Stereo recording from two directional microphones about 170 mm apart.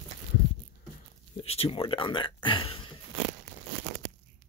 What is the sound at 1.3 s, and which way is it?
Speech, 35° left (ahead or behind).